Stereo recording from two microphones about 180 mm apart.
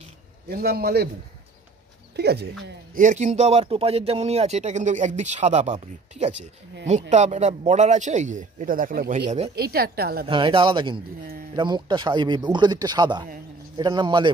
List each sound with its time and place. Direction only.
0.5 s a man's voice: 60° right (ahead or behind)
2.1 s a man's voice: 65° right (ahead or behind)
2.9 s a man's voice: 45° right (ahead or behind)
10.2 s speech: 30° right (ahead or behind)